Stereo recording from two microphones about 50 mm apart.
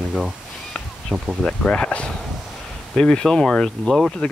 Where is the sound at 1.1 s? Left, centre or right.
Centre; by 2.1 s left.